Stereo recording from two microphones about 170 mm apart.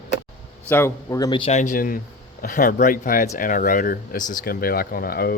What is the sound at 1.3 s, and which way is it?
Speech, 40° left (ahead or behind).